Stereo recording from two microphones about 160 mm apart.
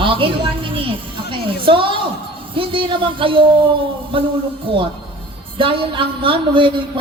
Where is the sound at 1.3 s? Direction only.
35° right (ahead or behind).